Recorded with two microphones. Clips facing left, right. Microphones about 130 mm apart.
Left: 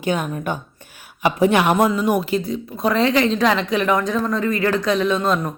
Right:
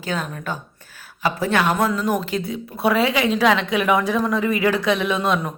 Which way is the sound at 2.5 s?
5° right (ahead or behind).